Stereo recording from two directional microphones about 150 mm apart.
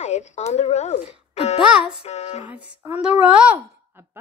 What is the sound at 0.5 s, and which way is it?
A child's voice, 45° left (ahead or behind).